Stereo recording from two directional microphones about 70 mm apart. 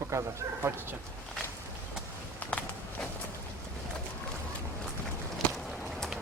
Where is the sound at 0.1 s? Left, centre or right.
Right.